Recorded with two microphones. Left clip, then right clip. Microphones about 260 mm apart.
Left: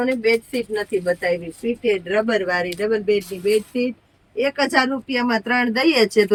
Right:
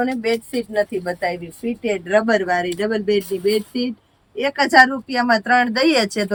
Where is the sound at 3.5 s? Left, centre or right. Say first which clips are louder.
Left 4 dB; centre.